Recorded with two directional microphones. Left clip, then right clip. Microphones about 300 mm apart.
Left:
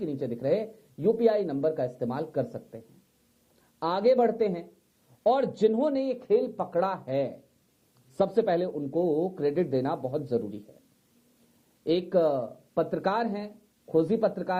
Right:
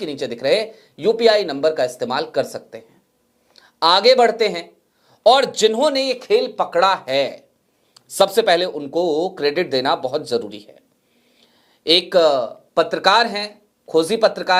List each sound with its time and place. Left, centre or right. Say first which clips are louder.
0.0 s speech: right 9 dB; centre
8.9 s speech: right 7 dB; right
9.3 s speech: right 8 dB; centre
11.9 s speech: right 11 dB; centre
12.3 s speech: right 11 dB; centre
12.7 s speech: right 13 dB; centre
13.5 s a sound: right 8 dB; right
14.1 s speech: right 11 dB; centre